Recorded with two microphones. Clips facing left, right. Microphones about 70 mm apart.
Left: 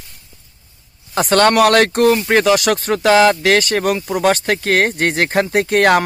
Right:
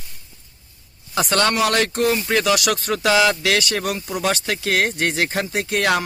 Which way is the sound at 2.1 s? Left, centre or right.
Left.